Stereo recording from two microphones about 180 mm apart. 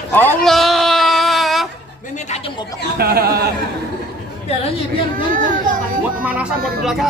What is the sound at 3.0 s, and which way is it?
Speech, 60° right (ahead or behind).